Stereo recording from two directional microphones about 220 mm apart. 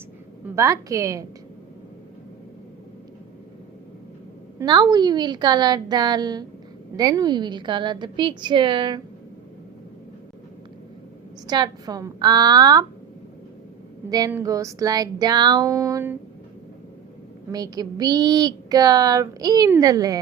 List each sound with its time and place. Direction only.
0.4 s a woman's voice: 15° right (ahead or behind)
4.6 s a woman's voice: 20° right (ahead or behind)
11.4 s a woman's voice: 20° right (ahead or behind)
14.1 s a woman's voice: 15° right (ahead or behind)
17.5 s a woman's voice: 15° right (ahead or behind)